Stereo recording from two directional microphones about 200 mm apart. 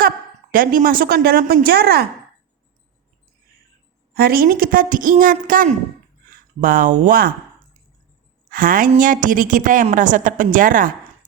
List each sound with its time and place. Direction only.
0.5 s a woman's voice: 45° right (ahead or behind)
4.1 s a woman's voice: 50° right (ahead or behind)
8.4 s a woman's voice: 45° right (ahead or behind)